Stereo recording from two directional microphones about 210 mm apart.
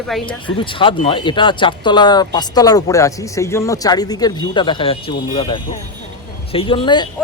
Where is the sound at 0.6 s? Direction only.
25° left (ahead or behind).